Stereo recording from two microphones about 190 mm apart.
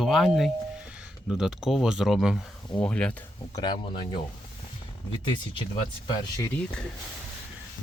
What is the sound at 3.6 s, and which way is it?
Speech, 25° left (ahead or behind).